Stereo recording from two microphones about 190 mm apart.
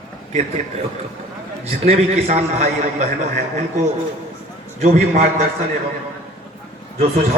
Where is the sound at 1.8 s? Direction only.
35° right (ahead or behind).